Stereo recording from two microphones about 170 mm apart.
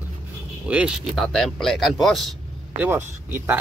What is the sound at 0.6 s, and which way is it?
Speech, 5° right (ahead or behind).